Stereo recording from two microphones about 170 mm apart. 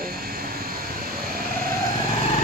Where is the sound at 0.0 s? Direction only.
60° right (ahead or behind).